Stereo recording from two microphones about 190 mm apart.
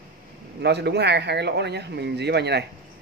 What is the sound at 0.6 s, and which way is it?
Speech, 60° right (ahead or behind).